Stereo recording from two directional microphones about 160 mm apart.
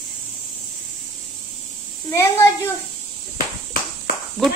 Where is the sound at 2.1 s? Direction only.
15° left (ahead or behind).